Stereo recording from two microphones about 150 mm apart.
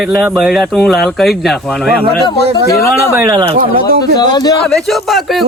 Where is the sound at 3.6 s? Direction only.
75° right (ahead or behind).